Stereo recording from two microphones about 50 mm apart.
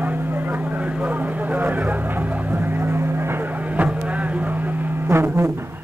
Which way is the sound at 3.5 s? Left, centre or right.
Right.